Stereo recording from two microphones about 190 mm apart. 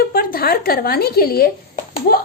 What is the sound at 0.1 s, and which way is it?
Speech, 50° left (ahead or behind).